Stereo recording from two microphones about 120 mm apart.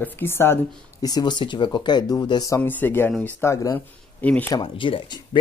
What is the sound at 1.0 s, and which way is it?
Speech, 35° left (ahead or behind).